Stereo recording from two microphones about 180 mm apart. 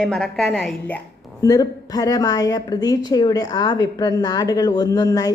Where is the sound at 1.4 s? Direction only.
20° left (ahead or behind).